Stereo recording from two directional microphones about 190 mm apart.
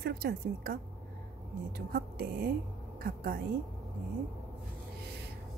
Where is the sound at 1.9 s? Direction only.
50° right (ahead or behind).